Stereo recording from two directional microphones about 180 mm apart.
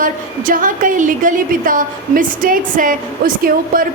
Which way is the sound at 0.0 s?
50° right (ahead or behind).